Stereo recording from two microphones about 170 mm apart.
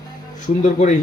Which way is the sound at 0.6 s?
45° left (ahead or behind).